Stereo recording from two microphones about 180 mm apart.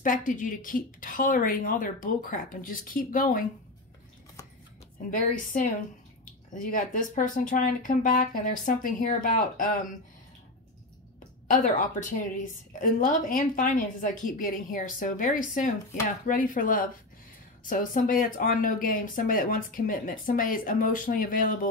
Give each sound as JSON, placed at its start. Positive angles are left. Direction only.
{"t": 0.0, "sound": "speech", "side_deg": 45}
{"t": 5.1, "sound": "speech", "side_deg": 50}
{"t": 11.4, "sound": "speech", "side_deg": 45}